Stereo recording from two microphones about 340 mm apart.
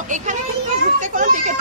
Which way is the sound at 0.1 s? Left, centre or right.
Right.